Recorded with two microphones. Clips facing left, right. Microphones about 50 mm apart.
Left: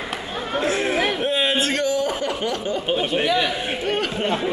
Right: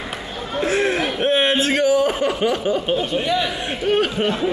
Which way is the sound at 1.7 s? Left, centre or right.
Centre.